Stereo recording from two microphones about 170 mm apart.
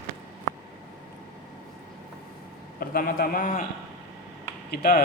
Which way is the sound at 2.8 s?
60° left (ahead or behind).